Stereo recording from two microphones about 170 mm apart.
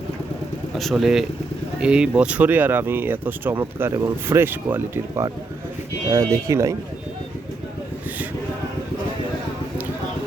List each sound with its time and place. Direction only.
0.8 s speech: centre (ahead or behind); by 6.7 s 20° right (ahead or behind)